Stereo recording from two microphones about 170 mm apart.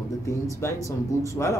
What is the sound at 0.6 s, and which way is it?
Speech, 15° left (ahead or behind).